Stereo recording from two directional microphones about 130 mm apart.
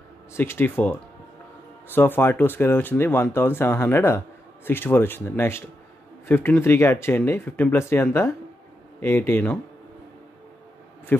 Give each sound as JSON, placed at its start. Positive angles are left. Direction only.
{"t": 0.3, "sound": "speech", "side_deg": 15}
{"t": 11.1, "sound": "speech", "side_deg": 15}